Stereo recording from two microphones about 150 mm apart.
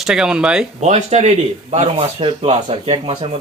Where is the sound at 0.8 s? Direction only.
45° right (ahead or behind).